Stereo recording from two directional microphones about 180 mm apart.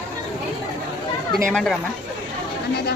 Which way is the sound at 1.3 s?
Centre (ahead or behind).